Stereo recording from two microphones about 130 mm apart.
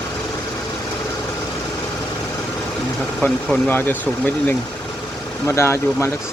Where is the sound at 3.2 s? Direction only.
10° left (ahead or behind).